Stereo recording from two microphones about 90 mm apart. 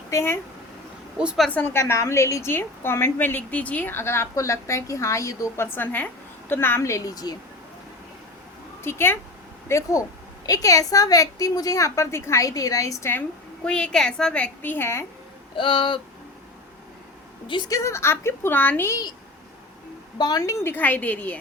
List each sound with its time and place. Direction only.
0.1 s speech: 30° left (ahead or behind)
1.5 s a woman's voice: 20° left (ahead or behind)
5.7 s a woman's voice: 20° left (ahead or behind); by 7.3 s 45° left (ahead or behind)
8.8 s a woman's voice: 25° left (ahead or behind)
13.7 s a woman's voice: 10° left (ahead or behind); by 15.0 s 25° left (ahead or behind)
15.5 s a sound: 70° left (ahead or behind)
17.7 s a woman's voice: 35° left (ahead or behind)
18.9 s a woman's voice: 45° left (ahead or behind)
20.1 s a woman's voice: 50° left (ahead or behind); by 21.3 s 15° left (ahead or behind)